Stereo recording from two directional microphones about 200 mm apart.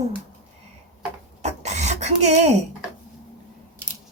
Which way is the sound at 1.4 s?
35° right (ahead or behind).